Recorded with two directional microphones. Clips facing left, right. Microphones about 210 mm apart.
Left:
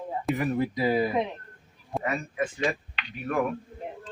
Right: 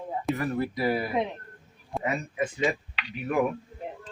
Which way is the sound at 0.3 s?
15° left (ahead or behind).